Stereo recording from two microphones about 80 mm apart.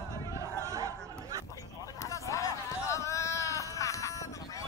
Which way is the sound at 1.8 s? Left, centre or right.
Left.